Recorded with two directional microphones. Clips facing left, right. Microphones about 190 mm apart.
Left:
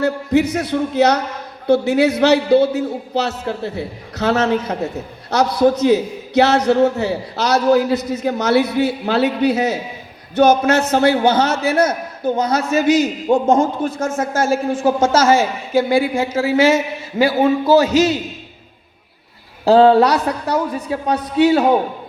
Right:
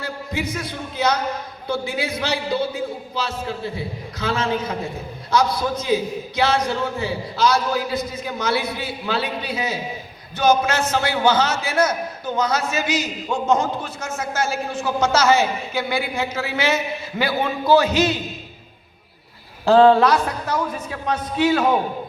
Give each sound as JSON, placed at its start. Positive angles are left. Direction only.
{"t": 0.0, "sound": "a man's voice", "side_deg": 70}
{"t": 19.6, "sound": "a man's voice", "side_deg": 35}